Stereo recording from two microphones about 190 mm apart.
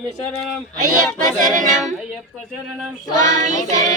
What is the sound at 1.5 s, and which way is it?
A capella, 40° right (ahead or behind).